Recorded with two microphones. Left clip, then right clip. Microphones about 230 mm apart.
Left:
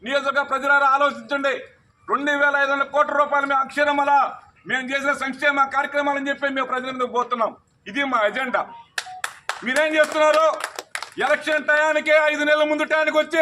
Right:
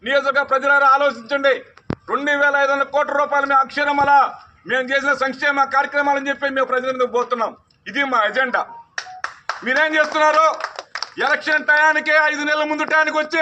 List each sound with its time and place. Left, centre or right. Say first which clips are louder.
0.0 s a man's voice: right 4 dB; centre
9.0 s clapping: right 1 dB; left
9.6 s a man's voice: right 2 dB; centre